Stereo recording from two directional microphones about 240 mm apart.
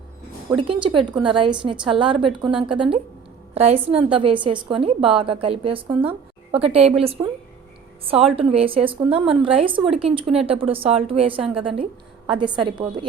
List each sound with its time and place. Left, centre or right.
0.5 s a woman's voice: right